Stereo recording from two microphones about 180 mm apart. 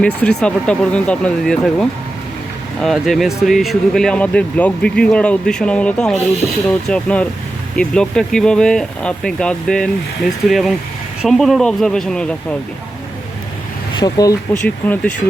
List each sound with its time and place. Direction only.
0.0 s speech: 5° left (ahead or behind)
13.9 s speech: 20° left (ahead or behind)